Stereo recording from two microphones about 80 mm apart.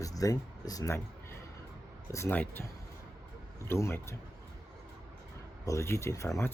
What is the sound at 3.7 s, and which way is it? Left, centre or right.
Speech, left.